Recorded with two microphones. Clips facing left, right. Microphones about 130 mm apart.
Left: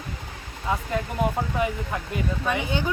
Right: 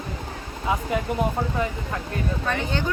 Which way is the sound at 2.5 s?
10° left (ahead or behind).